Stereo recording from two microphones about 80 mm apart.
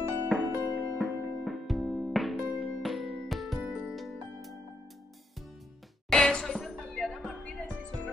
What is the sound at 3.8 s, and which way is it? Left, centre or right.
Music, centre.